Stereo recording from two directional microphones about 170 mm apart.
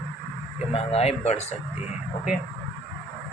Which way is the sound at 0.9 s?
40° left (ahead or behind).